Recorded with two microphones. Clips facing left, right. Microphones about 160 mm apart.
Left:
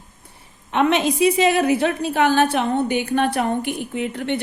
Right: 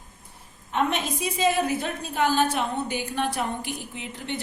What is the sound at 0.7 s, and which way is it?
A woman's voice, 90° left.